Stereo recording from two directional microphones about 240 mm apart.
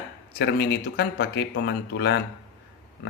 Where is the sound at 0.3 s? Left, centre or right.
Left.